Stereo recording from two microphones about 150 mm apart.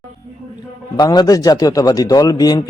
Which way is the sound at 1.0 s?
25° left (ahead or behind).